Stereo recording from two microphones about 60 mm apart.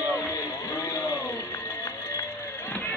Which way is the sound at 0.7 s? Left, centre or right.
Left.